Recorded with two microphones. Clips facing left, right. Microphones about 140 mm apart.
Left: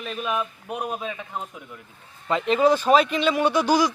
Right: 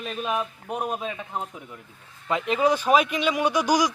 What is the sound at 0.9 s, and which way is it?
A man's voice, centre (ahead or behind).